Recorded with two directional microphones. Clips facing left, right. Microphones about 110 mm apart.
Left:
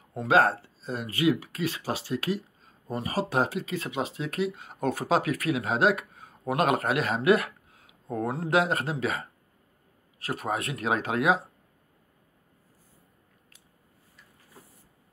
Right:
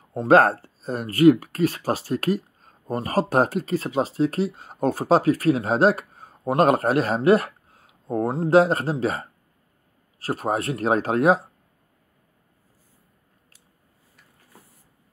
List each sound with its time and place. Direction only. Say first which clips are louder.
0.3 s speech: right 6 dB; 50° right (ahead or behind)